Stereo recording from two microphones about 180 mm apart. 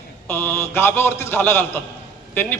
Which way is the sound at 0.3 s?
10° left (ahead or behind).